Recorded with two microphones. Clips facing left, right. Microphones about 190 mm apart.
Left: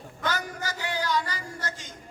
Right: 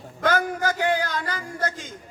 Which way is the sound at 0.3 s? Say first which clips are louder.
Right 9 dB; 55° right (ahead or behind).